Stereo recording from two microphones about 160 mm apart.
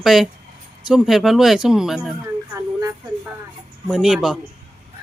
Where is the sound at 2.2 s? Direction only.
15° right (ahead or behind).